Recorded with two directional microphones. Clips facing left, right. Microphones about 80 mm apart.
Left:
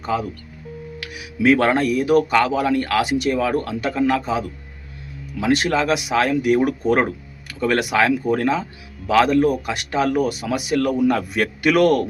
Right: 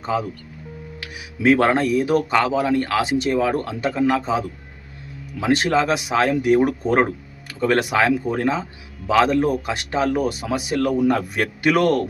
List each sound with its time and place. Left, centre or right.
0.0 s speech: right
5.6 s speech: right